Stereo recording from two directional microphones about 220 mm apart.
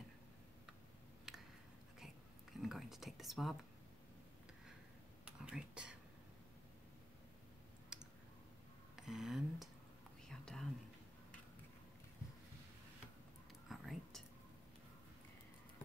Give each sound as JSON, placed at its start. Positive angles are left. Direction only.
{"t": 1.3, "sound": "a sound", "side_deg": 0}
{"t": 2.5, "sound": "speech", "side_deg": 0}
{"t": 5.2, "sound": "whispering", "side_deg": -5}
{"t": 7.9, "sound": "clicking", "side_deg": -5}
{"t": 8.9, "sound": "a sound", "side_deg": 0}
{"t": 10.2, "sound": "whispering", "side_deg": 5}
{"t": 13.7, "sound": "whispering", "side_deg": 0}